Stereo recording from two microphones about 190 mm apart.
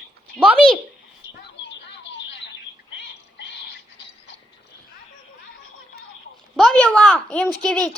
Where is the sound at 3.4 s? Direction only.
65° left (ahead or behind).